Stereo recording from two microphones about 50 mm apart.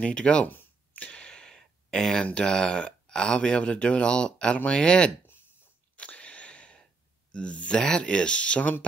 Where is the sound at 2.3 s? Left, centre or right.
Centre.